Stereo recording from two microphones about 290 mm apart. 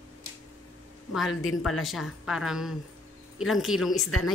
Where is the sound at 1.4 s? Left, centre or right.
Left.